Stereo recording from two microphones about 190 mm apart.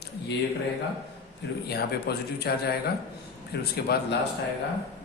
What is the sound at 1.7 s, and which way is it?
Speech, 60° left (ahead or behind).